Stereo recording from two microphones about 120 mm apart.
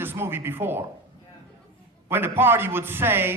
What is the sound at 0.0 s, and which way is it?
Speech, 20° right (ahead or behind).